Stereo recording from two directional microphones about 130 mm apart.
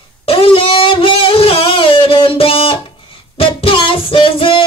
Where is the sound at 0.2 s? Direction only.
45° left (ahead or behind).